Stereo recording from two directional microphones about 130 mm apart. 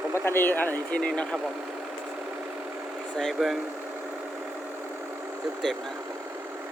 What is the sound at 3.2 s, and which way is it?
Speech, centre (ahead or behind).